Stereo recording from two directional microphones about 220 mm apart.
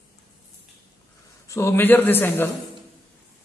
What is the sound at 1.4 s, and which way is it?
A man's voice, 15° left (ahead or behind).